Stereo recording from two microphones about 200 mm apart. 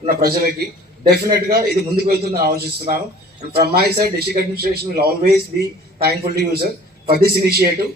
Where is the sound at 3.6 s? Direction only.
50° right (ahead or behind).